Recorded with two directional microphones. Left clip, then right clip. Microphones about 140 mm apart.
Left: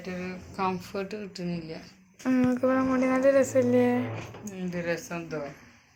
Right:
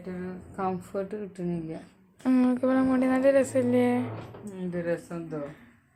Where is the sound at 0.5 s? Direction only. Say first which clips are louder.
Left 1 dB; 55° right (ahead or behind); by 1.7 s 75° right (ahead or behind).